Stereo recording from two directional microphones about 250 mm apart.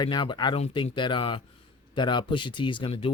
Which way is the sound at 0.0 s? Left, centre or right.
Centre.